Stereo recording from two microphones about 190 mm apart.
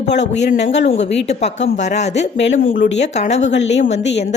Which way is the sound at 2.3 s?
70° left (ahead or behind).